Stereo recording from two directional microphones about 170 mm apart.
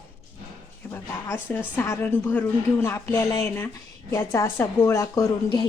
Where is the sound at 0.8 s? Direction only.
15° left (ahead or behind).